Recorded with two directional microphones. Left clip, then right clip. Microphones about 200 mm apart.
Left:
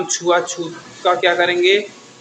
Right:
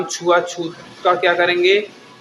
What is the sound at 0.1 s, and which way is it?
Speech, centre (ahead or behind).